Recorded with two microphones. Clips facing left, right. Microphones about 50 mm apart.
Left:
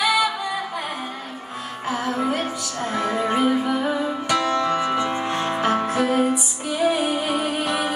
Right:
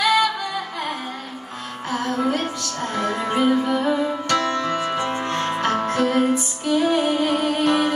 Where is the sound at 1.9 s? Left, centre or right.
Centre.